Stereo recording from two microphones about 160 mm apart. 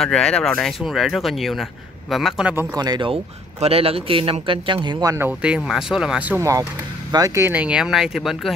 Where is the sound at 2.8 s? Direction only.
30° right (ahead or behind).